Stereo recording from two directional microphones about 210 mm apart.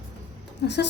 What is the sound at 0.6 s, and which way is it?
Speech, 50° left (ahead or behind).